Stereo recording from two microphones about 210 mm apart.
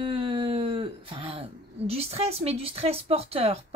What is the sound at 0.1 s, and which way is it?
Speech, 25° right (ahead or behind).